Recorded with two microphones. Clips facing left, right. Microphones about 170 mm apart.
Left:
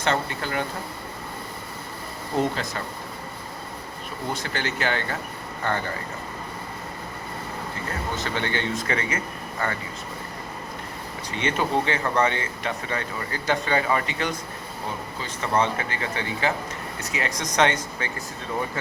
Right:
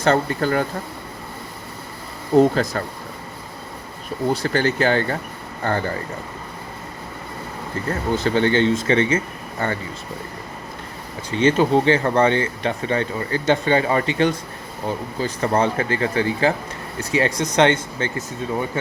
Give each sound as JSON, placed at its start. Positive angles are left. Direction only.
{"t": 0.0, "sound": "speech", "side_deg": -40}
{"t": 2.4, "sound": "speech", "side_deg": -40}
{"t": 4.4, "sound": "speech", "side_deg": -40}
{"t": 8.1, "sound": "speech", "side_deg": -35}
{"t": 11.3, "sound": "speech", "side_deg": -30}